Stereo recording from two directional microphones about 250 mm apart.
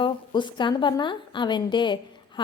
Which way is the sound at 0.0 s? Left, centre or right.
Centre.